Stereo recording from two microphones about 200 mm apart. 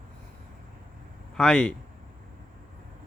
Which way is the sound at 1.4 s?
5° left (ahead or behind).